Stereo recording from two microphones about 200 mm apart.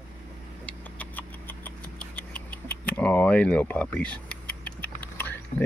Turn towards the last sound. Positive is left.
turn(degrees=10)  # may be behind; listen again after turning